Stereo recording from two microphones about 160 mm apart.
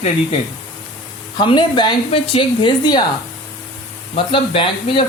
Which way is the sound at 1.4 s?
30° left (ahead or behind).